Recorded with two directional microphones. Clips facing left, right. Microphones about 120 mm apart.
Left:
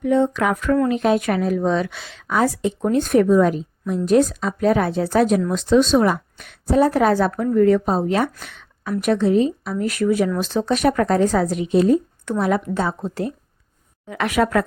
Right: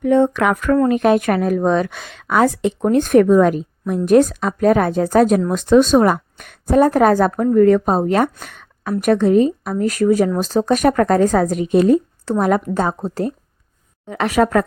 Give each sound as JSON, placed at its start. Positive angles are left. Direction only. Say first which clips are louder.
{"t": 0.0, "sound": "a woman's voice", "louder": "right 3 dB", "side_deg": -55}